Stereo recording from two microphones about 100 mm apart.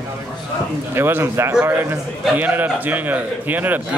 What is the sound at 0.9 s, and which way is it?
A man's voice, 25° right (ahead or behind).